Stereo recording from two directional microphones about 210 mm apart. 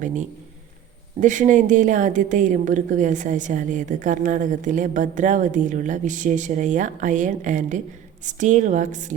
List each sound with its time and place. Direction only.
0.0 s a woman's voice: 35° right (ahead or behind)